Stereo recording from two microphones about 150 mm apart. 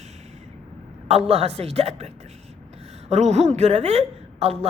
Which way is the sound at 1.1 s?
45° right (ahead or behind).